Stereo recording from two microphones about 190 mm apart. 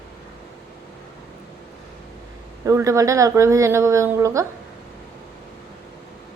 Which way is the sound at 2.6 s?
15° right (ahead or behind).